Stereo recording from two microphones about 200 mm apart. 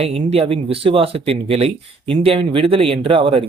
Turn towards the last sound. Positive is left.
turn(degrees=-25)  # may be behind; listen again after turning